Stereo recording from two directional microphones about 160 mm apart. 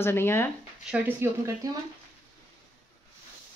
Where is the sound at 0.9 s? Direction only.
15° right (ahead or behind).